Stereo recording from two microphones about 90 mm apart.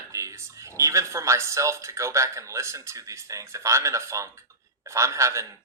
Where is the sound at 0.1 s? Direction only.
35° right (ahead or behind).